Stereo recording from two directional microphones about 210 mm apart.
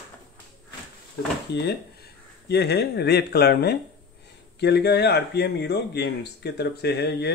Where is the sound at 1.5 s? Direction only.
50° left (ahead or behind).